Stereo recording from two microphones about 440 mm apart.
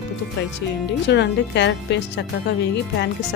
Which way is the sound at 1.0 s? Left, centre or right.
Left.